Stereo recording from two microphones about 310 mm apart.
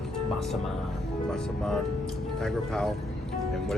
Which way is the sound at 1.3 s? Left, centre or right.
Centre.